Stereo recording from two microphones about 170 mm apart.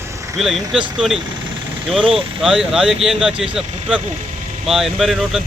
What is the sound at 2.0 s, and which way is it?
Speech, 30° right (ahead or behind).